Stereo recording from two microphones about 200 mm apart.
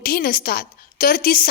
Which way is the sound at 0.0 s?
50° left (ahead or behind).